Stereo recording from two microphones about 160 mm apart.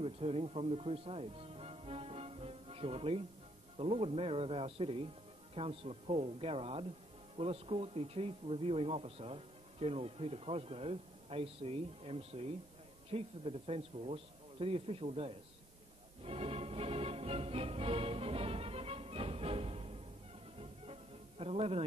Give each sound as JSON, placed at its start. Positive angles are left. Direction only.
{"t": 0.0, "sound": "speech", "side_deg": -35}
{"t": 16.3, "sound": "music", "side_deg": -40}